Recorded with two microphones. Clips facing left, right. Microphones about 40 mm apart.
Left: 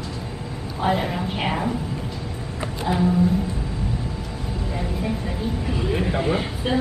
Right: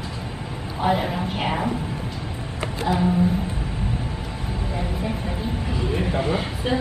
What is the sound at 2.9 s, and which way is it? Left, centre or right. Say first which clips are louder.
Music: even; centre.